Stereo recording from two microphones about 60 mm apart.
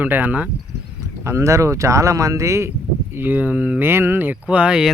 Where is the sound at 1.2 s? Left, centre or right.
Right.